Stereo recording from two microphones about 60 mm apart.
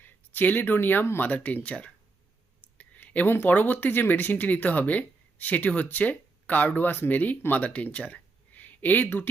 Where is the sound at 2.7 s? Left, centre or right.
Left.